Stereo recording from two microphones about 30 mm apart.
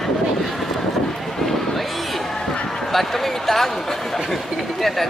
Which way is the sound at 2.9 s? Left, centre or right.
Centre.